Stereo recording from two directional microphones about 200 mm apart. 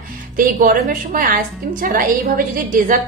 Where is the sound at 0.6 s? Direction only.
45° right (ahead or behind).